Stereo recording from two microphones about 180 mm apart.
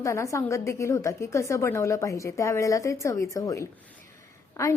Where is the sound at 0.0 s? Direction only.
15° left (ahead or behind).